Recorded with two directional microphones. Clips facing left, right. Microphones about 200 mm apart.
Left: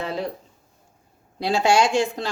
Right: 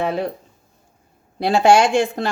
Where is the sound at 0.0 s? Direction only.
60° right (ahead or behind).